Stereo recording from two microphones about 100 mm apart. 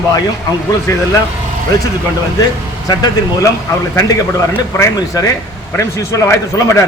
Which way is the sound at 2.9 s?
40° left (ahead or behind).